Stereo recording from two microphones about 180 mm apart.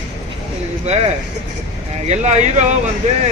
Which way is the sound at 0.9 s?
35° right (ahead or behind).